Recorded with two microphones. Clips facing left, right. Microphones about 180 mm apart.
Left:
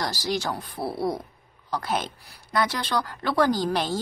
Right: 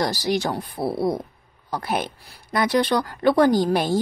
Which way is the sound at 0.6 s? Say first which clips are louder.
Right 5 dB; 15° right (ahead or behind).